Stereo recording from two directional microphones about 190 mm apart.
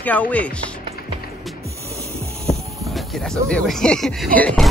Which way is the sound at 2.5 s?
Centre (ahead or behind).